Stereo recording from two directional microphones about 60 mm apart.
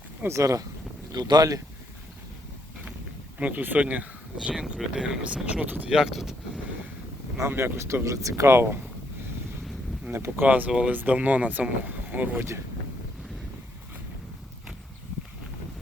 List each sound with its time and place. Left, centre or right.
0.3 s speech: right
1.2 s speech: right
3.3 s speech: right
4.7 s speech: centre
5.9 s speech: centre
7.4 s speech: right
10.1 s speech: right
10.7 s speech: centre
10.9 s speech: right